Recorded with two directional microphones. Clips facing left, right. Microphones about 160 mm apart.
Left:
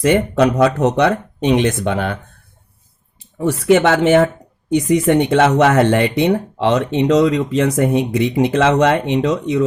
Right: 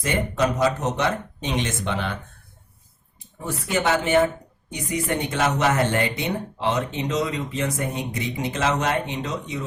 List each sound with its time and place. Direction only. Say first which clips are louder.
0.0 s speech: left 9 dB; 70° left (ahead or behind)
3.3 s speech: left 13 dB; 90° left